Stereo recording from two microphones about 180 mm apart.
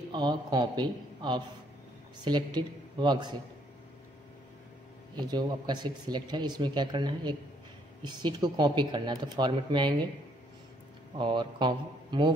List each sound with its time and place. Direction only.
0.1 s speech: 25° right (ahead or behind)
5.1 s speech: 25° right (ahead or behind)
11.1 s speech: 25° right (ahead or behind)